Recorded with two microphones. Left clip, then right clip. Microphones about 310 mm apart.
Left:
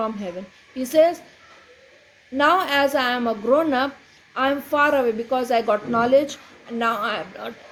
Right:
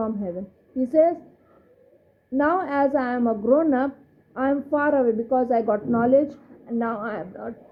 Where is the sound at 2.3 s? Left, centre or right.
Left.